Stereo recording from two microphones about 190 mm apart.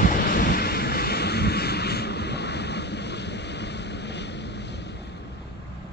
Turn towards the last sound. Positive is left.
turn(degrees=65)  # may be behind; listen again after turning